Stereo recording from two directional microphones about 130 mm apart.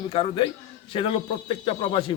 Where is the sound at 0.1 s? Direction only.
40° left (ahead or behind).